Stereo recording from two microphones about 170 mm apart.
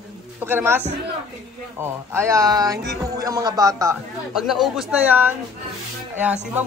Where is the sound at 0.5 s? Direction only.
10° right (ahead or behind).